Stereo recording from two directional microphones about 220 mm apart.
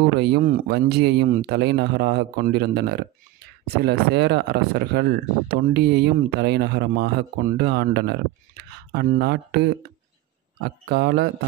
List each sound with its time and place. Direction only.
0.2 s speech: 45° right (ahead or behind)